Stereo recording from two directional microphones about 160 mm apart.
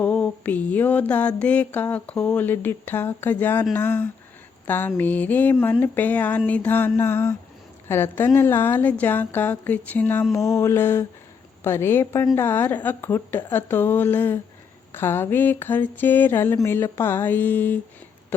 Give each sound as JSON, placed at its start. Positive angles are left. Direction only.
{"t": 0.0, "sound": "mantra", "side_deg": 10}
{"t": 1.4, "sound": "a woman's voice", "side_deg": 10}